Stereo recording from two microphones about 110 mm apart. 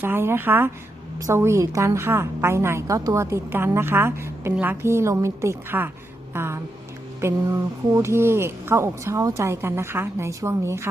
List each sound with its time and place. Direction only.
0.0 s speech: 20° right (ahead or behind)